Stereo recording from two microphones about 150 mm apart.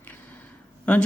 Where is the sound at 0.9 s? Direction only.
10° left (ahead or behind).